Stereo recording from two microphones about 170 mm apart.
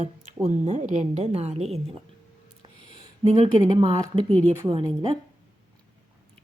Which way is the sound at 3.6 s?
25° right (ahead or behind).